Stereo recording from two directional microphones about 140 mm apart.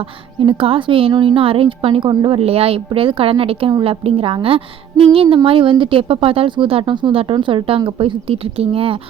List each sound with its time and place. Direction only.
0.0 s a woman's voice: 40° right (ahead or behind)